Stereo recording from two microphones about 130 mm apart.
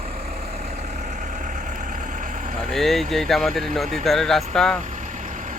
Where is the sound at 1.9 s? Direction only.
85° right.